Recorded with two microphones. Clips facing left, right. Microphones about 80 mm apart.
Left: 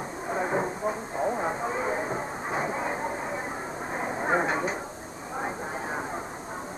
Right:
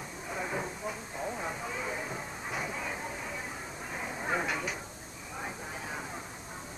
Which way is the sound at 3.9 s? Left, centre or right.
Left.